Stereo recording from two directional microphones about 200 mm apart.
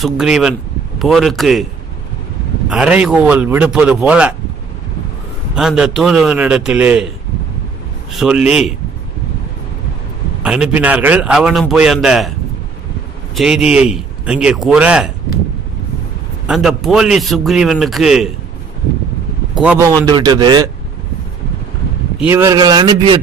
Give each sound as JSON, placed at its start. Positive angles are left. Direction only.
{"t": 0.0, "sound": "a man's voice", "side_deg": -5}
{"t": 2.7, "sound": "speech", "side_deg": -5}
{"t": 5.5, "sound": "a man's voice", "side_deg": -5}
{"t": 8.1, "sound": "a man's voice", "side_deg": 0}
{"t": 10.4, "sound": "a man's voice", "side_deg": -5}
{"t": 13.3, "sound": "a man's voice", "side_deg": -5}
{"t": 16.4, "sound": "a man's voice", "side_deg": 0}
{"t": 19.5, "sound": "a man's voice", "side_deg": -5}
{"t": 20.1, "sound": "speech", "side_deg": -20}
{"t": 22.2, "sound": "speech", "side_deg": -10}